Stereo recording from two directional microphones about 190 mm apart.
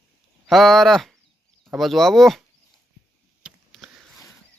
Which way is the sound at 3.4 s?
Centre (ahead or behind).